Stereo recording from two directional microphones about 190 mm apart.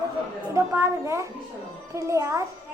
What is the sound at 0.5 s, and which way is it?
A child's voice, 15° right (ahead or behind).